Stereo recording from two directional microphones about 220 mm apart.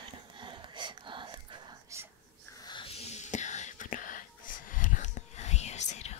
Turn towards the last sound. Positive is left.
turn(degrees=30)  # may be behind; listen again after turning